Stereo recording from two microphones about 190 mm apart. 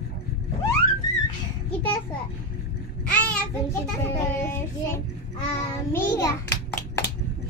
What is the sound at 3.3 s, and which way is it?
A child's voice, 15° left (ahead or behind).